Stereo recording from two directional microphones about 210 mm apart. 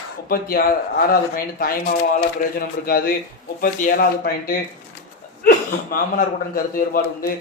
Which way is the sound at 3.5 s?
40° left (ahead or behind).